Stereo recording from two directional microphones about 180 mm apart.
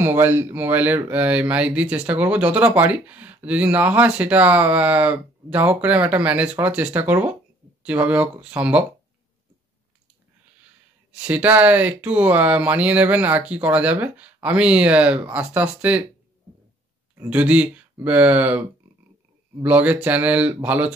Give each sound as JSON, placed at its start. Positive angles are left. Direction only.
{"t": 0.0, "sound": "speech", "side_deg": -10}
{"t": 11.1, "sound": "speech", "side_deg": -10}
{"t": 17.1, "sound": "speech", "side_deg": -10}